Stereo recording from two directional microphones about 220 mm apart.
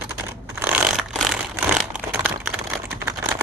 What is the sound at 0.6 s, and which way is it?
Vehicle, 5° right (ahead or behind).